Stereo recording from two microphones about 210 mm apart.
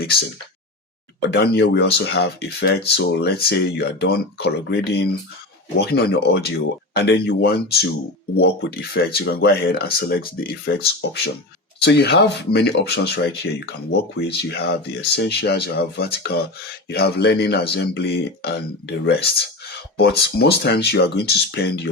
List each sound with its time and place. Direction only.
1.3 s speech: 55° left (ahead or behind)